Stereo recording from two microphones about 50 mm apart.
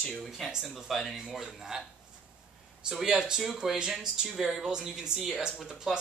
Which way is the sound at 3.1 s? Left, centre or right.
Centre.